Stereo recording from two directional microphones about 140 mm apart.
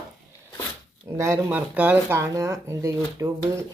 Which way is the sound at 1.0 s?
20° right (ahead or behind).